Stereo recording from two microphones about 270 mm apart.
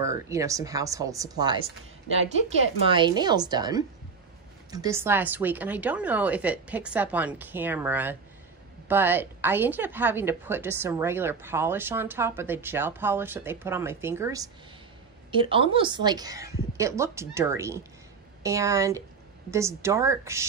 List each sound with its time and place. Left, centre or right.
0.0 s a woman's voice: centre
2.9 s a woman's voice: centre